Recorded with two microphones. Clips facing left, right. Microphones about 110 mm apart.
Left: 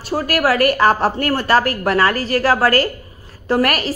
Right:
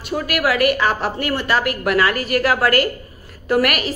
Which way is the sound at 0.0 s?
35° left (ahead or behind).